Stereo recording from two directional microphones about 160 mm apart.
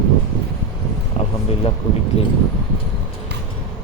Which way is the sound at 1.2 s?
45° left (ahead or behind).